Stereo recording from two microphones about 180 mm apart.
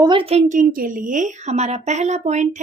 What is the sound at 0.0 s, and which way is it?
A woman's voice, 30° right (ahead or behind).